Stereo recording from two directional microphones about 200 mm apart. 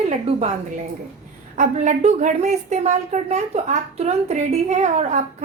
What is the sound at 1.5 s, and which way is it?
A woman's voice, 40° right (ahead or behind).